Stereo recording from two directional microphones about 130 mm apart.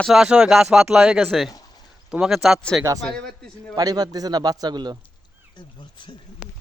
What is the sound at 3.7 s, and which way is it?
Speech, 30° right (ahead or behind).